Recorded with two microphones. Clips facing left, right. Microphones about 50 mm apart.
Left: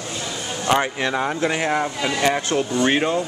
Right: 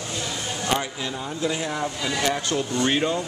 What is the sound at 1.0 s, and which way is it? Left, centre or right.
Speech, left.